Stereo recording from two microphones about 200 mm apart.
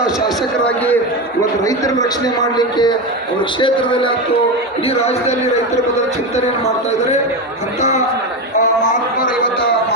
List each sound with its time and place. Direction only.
0.0 s a man's voice: 5° left (ahead or behind)
1.4 s a man's voice: 15° left (ahead or behind)
4.9 s a man's voice: 30° left (ahead or behind)
7.8 s a man's voice: 35° left (ahead or behind)